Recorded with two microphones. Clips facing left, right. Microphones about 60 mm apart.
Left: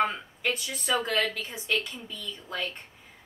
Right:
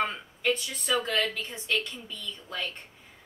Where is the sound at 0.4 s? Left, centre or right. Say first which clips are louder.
Right 3 dB; centre.